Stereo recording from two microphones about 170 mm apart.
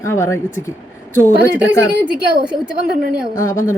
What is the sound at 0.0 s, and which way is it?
Speech, 15° left (ahead or behind).